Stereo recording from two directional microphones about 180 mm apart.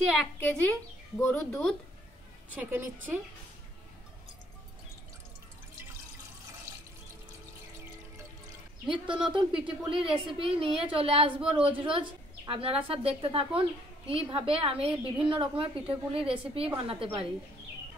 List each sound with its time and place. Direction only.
0.4 s speech: 10° left (ahead or behind)
2.5 s a woman's voice: 10° right (ahead or behind)
8.8 s a woman's voice: 25° right (ahead or behind)